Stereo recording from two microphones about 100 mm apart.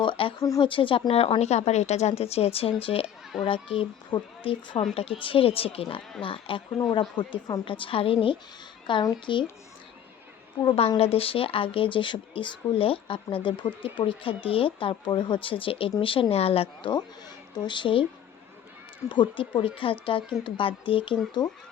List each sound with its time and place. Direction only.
0.0 s a sound: 55° left (ahead or behind)
0.6 s a woman's voice: 60° left (ahead or behind)
7.2 s speech: 45° left (ahead or behind)
7.6 s speech: 60° left (ahead or behind)
10.8 s speech: 80° left; by 16.2 s 65° left (ahead or behind)
16.3 s a woman's voice: 80° left
17.5 s speech: 50° left (ahead or behind)
19.0 s speech: 50° left (ahead or behind)